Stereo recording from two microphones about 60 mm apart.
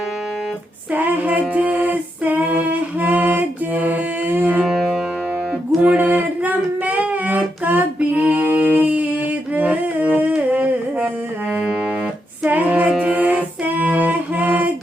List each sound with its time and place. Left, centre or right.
0.9 s music: right
1.5 s a sound: right
4.6 s music: centre
5.8 s singing: right
9.6 s music: right
12.5 s female singing: right
13.0 s music: right